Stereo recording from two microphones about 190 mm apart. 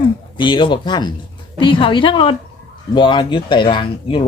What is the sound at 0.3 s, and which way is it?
Speech, 25° left (ahead or behind).